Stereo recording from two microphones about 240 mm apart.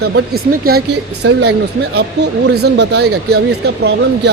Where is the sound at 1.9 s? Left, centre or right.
Right.